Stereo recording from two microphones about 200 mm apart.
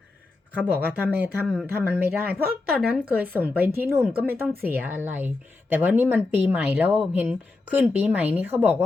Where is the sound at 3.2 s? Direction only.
10° right (ahead or behind).